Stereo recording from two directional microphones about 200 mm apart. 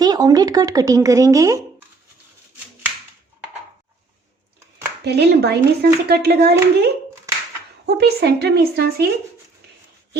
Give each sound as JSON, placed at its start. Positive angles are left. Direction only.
{"t": 0.0, "sound": "speech", "side_deg": -20}
{"t": 5.0, "sound": "a child's voice", "side_deg": -55}